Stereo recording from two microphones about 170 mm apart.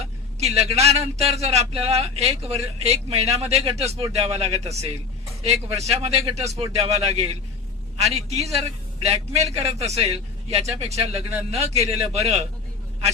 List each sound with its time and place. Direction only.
0.0 s a man's voice: 40° right (ahead or behind)
10.8 s a man's voice: 40° right (ahead or behind)